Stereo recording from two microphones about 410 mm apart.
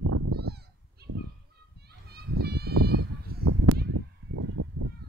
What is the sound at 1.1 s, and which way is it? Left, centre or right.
Fowl, right.